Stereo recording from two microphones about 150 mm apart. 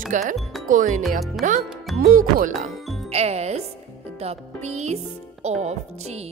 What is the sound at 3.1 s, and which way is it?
Speech, 45° right (ahead or behind).